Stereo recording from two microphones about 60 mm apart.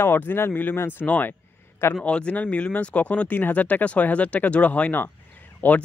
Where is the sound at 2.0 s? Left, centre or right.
Centre.